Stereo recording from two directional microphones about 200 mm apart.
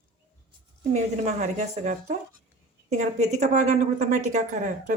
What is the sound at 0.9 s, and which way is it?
A woman's voice, 35° right (ahead or behind).